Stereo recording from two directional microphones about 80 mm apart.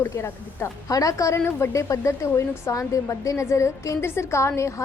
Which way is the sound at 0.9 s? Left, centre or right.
Left.